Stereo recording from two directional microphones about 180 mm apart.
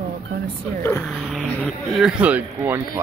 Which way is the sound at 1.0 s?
Centre (ahead or behind).